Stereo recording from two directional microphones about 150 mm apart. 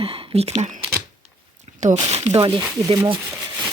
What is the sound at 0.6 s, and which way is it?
Speech, 55° right (ahead or behind).